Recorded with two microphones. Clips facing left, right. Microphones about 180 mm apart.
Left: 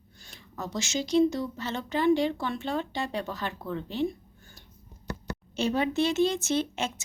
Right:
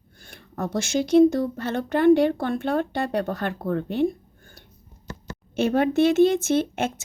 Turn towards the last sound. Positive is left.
turn(degrees=-55)  # may be behind; listen again after turning